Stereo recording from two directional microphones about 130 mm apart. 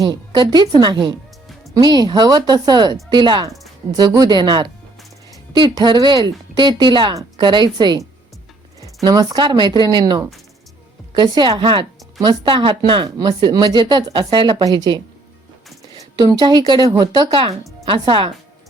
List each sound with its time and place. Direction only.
0.0 s speech: 30° right (ahead or behind)
16.1 s speech: 35° right (ahead or behind)